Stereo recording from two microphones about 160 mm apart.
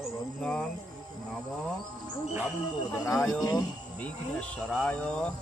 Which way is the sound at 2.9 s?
5° left (ahead or behind).